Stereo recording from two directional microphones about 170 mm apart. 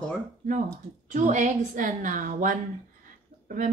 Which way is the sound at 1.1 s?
45° right (ahead or behind).